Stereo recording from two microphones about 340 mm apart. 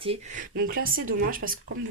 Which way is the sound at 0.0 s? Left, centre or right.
Centre.